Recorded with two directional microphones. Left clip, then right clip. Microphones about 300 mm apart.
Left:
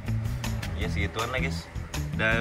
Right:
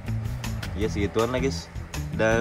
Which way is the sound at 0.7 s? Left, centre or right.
Right.